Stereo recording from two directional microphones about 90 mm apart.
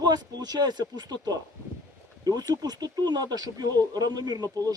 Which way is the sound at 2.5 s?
50° right (ahead or behind).